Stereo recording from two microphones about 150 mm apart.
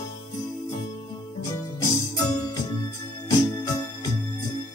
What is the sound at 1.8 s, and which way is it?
Music, 25° left (ahead or behind).